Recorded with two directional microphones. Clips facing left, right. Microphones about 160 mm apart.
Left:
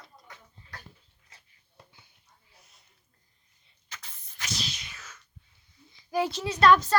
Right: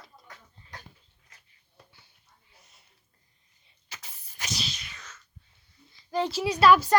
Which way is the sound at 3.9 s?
15° right (ahead or behind).